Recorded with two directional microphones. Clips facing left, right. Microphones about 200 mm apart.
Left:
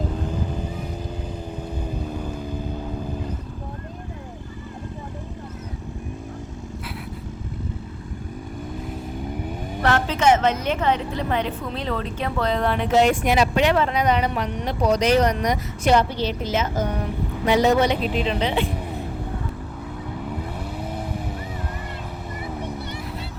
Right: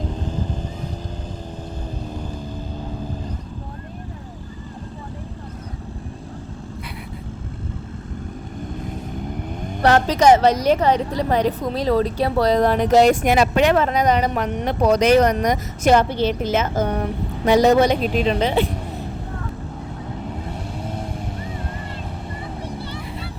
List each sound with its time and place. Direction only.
10.1 s a woman's voice: 35° right (ahead or behind)
20.8 s vehicle: 10° left (ahead or behind)